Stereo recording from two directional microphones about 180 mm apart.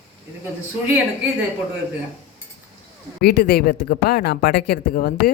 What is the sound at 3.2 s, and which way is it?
Speech, 60° left (ahead or behind).